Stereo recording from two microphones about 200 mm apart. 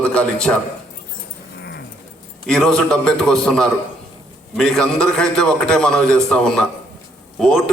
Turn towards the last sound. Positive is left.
turn(degrees=5)  # may be behind; listen again after turning